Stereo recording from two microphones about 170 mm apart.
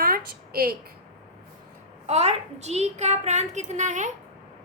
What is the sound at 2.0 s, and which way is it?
A woman's voice, 40° right (ahead or behind).